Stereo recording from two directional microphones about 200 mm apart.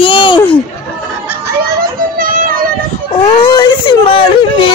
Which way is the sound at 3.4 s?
20° left (ahead or behind).